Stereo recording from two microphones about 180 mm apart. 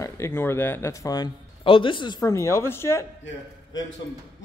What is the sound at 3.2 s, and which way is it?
Speech, 90° left.